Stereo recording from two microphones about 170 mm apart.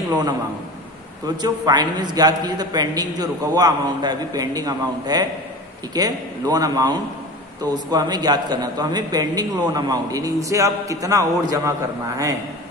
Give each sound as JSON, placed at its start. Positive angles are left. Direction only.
{"t": 1.2, "sound": "a man's voice", "side_deg": -25}